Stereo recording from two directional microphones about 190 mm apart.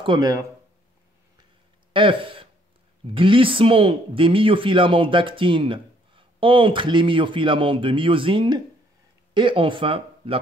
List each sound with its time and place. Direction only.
0.0 s speech: 20° right (ahead or behind)
2.0 s speech: 25° right (ahead or behind)